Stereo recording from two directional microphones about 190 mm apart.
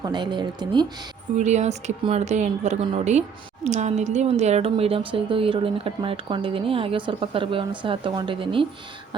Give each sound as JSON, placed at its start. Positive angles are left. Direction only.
{"t": 0.0, "sound": "a woman's voice", "side_deg": -25}
{"t": 1.4, "sound": "a woman's voice", "side_deg": -35}